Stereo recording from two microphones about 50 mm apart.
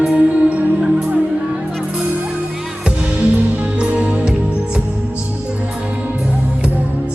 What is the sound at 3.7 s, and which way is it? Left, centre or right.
Music, right.